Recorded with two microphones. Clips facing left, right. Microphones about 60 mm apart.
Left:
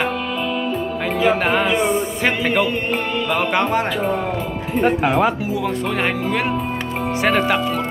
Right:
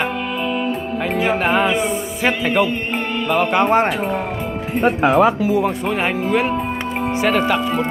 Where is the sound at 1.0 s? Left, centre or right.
Centre.